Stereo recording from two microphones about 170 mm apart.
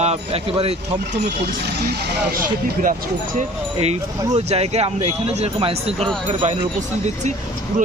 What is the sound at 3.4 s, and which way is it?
Speech, 40° right (ahead or behind).